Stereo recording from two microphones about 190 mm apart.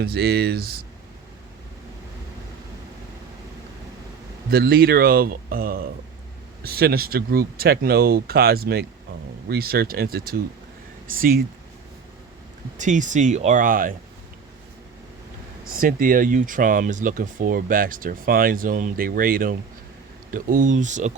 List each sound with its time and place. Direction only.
0.0 s speech: 55° right (ahead or behind)
4.4 s speech: 55° right (ahead or behind)
12.7 s speech: 40° right (ahead or behind)
15.8 s speech: 50° right (ahead or behind)